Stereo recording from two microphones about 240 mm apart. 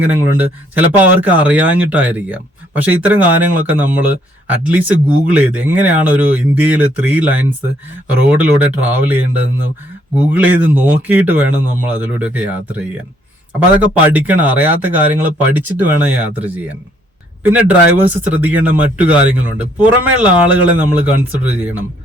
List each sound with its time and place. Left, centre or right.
0.0 s speech: centre